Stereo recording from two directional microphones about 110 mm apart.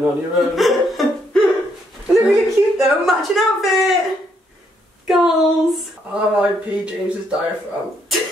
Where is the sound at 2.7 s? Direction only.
Centre (ahead or behind).